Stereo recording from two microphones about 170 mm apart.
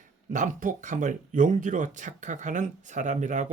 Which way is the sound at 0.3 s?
50° right (ahead or behind).